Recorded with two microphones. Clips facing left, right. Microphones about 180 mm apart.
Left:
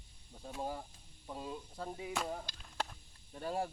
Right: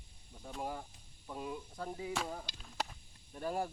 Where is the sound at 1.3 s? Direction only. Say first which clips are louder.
Right 1 dB; 25° left (ahead or behind).